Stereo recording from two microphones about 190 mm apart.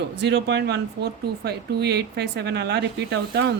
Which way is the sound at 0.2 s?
65° right (ahead or behind).